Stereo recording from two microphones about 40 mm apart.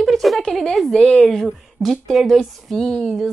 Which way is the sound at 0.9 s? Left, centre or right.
Centre.